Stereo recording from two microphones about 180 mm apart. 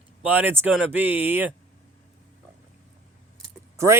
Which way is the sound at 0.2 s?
10° right (ahead or behind).